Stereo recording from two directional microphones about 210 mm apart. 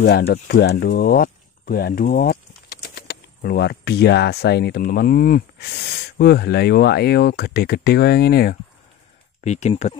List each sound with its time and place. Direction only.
0.3 s speech: 50° left (ahead or behind)
9.4 s speech: 35° left (ahead or behind)